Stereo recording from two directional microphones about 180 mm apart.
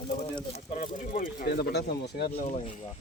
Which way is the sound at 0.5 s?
40° left (ahead or behind).